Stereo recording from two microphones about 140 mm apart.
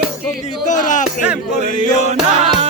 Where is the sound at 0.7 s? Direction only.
65° left (ahead or behind).